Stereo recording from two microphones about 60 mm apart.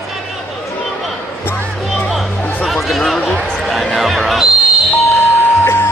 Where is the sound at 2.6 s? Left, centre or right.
Centre.